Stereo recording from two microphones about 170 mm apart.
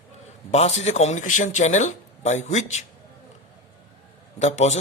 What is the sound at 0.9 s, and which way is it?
Speech, 40° left (ahead or behind).